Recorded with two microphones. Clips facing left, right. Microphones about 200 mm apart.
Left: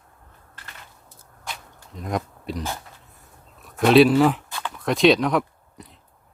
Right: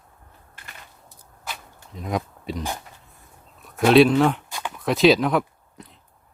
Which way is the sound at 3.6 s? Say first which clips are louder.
Even; centre (ahead or behind).